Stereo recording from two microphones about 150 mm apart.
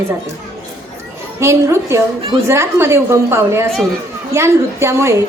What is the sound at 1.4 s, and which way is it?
A woman's voice, 20° right (ahead or behind).